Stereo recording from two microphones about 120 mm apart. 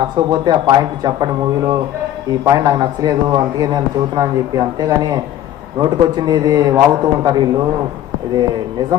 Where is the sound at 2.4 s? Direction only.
25° right (ahead or behind).